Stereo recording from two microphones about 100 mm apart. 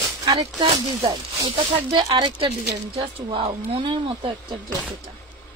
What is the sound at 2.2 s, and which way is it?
Speech, 60° right (ahead or behind).